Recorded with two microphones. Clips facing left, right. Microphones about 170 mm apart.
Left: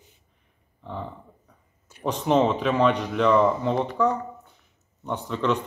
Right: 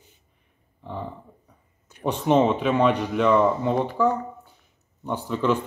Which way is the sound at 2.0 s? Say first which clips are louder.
Right 1 dB; 5° right (ahead or behind).